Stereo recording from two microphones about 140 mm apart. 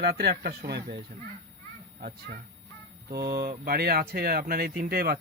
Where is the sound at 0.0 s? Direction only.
90° right.